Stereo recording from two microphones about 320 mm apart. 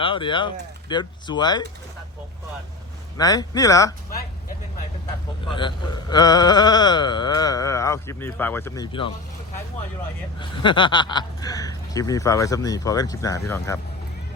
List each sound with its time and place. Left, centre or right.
0.0 s speech: centre
3.2 s speech: centre
5.5 s speech: centre
10.4 s speech: centre